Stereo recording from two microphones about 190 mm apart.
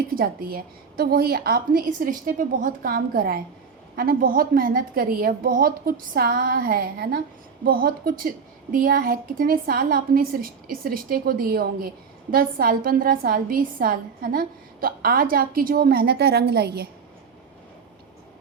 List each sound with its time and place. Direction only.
0.1 s a woman's voice: 50° right (ahead or behind)